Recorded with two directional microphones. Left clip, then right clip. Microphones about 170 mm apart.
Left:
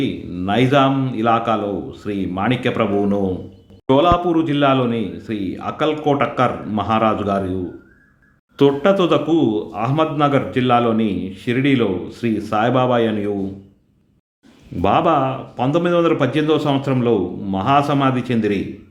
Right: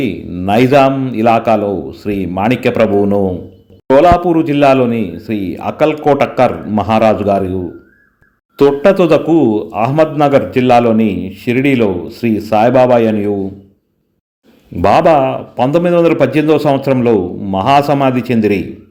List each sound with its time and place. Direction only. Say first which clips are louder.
0.0 s a man's voice: right 5 dB; 25° right (ahead or behind)
8.5 s a man's voice: right 6 dB; 25° right (ahead or behind)
14.8 s a man's voice: right 7 dB; 25° right (ahead or behind)